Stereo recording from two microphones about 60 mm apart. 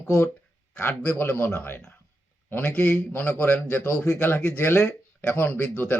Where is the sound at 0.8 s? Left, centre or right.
Left.